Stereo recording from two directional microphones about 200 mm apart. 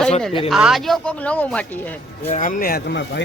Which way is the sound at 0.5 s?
Centre (ahead or behind).